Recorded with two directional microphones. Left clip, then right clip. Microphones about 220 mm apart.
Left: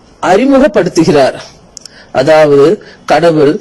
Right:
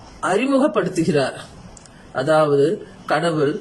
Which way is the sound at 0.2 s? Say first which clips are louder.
Left 11 dB; 30° left (ahead or behind).